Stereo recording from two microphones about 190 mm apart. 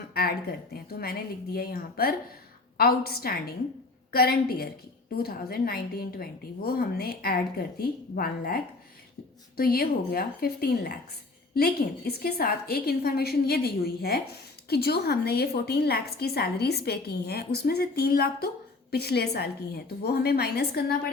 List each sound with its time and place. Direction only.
0.1 s a woman's voice: 55° left (ahead or behind)